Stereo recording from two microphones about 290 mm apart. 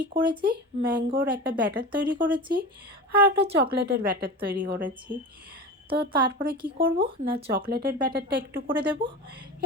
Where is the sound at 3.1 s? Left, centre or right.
Right.